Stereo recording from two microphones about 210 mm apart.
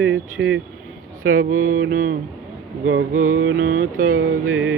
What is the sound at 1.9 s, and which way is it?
Speech, 40° right (ahead or behind).